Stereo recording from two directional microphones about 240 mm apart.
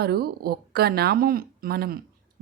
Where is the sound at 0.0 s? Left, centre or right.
Right.